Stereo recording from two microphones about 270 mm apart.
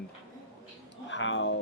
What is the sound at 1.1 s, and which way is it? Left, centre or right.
Speech, left.